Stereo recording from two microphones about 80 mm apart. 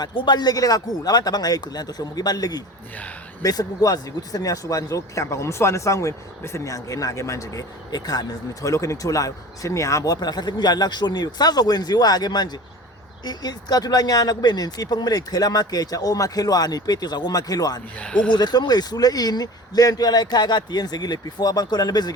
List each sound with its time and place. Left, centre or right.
0.0 s speech: left
18.0 s speech: centre
18.3 s speech: left